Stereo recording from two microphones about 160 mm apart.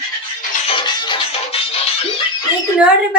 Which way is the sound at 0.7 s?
30° left (ahead or behind).